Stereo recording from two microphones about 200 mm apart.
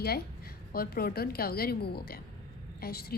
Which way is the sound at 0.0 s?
50° left (ahead or behind).